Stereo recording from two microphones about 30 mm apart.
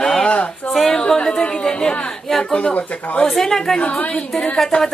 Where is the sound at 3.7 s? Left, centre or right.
Left.